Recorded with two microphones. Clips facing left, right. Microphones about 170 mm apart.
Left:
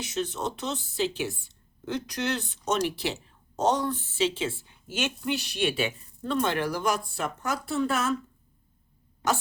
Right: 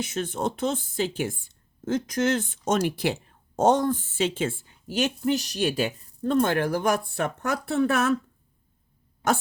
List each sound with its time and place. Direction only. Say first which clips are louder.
0.0 s speech: right 3 dB; 50° right (ahead or behind)